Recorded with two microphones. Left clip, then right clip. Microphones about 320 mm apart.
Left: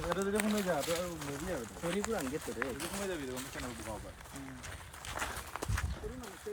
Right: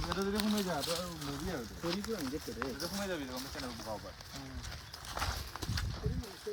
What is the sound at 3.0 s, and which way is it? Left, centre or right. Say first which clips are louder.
Speech: even; right.